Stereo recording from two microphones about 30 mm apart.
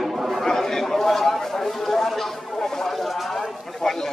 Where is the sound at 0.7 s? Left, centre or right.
Centre.